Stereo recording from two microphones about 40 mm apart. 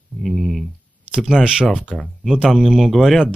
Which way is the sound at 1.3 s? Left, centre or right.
Centre.